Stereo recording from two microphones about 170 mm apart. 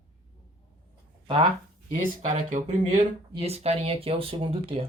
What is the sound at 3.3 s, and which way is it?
Speech, 35° right (ahead or behind).